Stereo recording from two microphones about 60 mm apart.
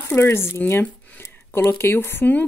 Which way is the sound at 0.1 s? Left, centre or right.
Left.